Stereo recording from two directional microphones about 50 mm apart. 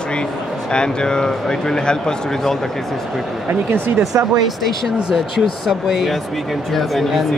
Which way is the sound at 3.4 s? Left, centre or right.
Right.